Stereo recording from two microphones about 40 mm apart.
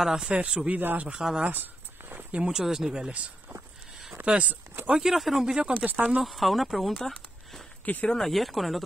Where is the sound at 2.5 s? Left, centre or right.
Centre.